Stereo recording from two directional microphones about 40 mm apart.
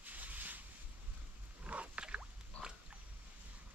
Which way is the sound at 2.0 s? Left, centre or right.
Right.